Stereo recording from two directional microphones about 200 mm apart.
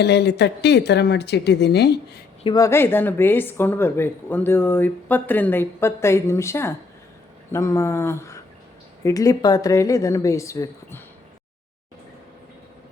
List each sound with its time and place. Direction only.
0.0 s speech: 55° left (ahead or behind)
2.4 s a woman's voice: 20° left (ahead or behind)